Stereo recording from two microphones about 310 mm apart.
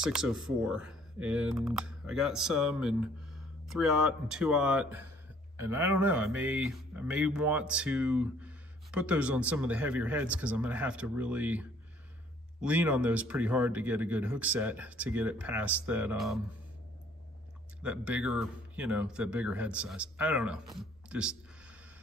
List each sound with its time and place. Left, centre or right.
0.0 s speech: centre
17.8 s speech: centre